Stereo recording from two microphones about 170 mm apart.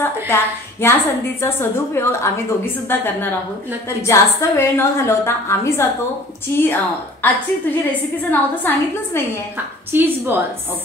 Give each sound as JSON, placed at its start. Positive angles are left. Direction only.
{"t": 0.0, "sound": "a woman's voice", "side_deg": 15}
{"t": 9.9, "sound": "a woman's voice", "side_deg": -10}